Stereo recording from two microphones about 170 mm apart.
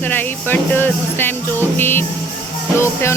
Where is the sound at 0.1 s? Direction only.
10° left (ahead or behind).